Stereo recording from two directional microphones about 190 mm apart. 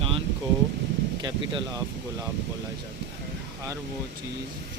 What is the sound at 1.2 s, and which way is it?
Speech, 20° right (ahead or behind).